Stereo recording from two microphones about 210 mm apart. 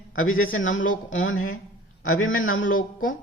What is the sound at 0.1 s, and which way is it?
Speech, 70° left (ahead or behind).